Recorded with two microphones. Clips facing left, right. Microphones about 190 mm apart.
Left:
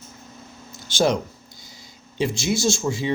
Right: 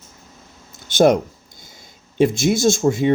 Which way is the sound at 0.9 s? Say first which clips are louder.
Right 7 dB; 50° right (ahead or behind).